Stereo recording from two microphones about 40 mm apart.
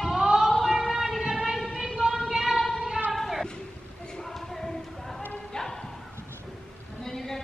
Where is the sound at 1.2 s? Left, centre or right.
Right.